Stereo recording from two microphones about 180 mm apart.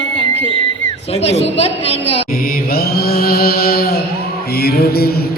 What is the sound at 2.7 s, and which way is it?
Music, 55° left (ahead or behind).